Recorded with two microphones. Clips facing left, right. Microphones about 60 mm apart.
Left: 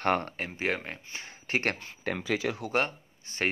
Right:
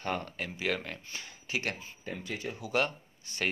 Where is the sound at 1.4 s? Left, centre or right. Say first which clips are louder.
Left 5 dB; left.